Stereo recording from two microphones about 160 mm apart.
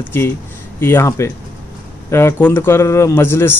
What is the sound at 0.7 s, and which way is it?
A man's voice, 15° left (ahead or behind).